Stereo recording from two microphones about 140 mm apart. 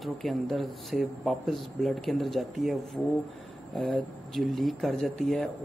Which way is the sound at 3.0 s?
15° left (ahead or behind).